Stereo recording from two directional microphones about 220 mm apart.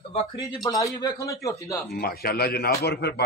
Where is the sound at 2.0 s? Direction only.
45° left (ahead or behind).